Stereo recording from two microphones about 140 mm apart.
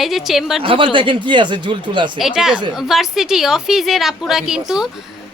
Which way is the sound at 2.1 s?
Centre (ahead or behind).